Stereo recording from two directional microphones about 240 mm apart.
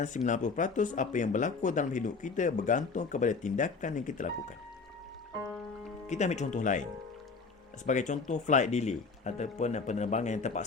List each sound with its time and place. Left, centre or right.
0.0 s speech: left
6.1 s speech: left
7.9 s speech: left